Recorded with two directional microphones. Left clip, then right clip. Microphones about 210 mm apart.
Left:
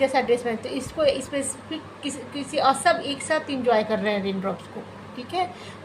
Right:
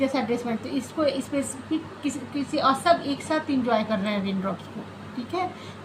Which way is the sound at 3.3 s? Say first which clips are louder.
Left 3 dB; 35° left (ahead or behind).